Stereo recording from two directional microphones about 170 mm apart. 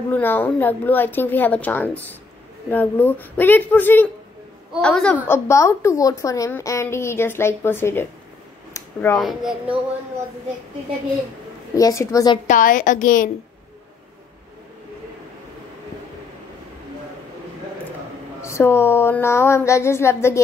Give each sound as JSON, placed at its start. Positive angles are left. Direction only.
{"t": 0.1, "sound": "a woman's voice", "side_deg": 10}
{"t": 8.7, "sound": "a sound", "side_deg": 20}
{"t": 9.2, "sound": "speech", "side_deg": 0}
{"t": 11.7, "sound": "a woman's voice", "side_deg": 20}
{"t": 12.4, "sound": "a woman's voice", "side_deg": 50}
{"t": 18.4, "sound": "a woman's voice", "side_deg": 15}